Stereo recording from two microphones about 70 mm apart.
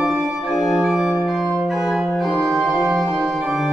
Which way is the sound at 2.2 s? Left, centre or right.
Centre.